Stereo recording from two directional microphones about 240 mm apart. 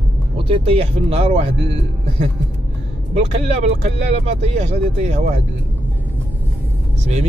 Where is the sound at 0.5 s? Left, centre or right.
Right.